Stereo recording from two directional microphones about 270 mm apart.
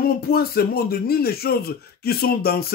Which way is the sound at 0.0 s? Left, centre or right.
Left.